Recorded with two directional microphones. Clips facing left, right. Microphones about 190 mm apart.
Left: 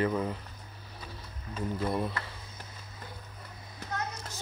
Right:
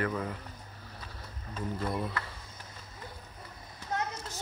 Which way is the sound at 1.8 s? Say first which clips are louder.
Left 3 dB; 25° left (ahead or behind).